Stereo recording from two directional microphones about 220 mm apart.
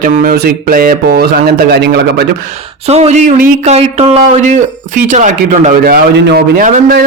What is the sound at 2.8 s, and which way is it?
A man's voice, 30° right (ahead or behind).